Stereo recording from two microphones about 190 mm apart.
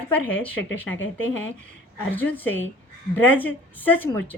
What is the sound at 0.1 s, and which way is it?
Speech, 10° left (ahead or behind).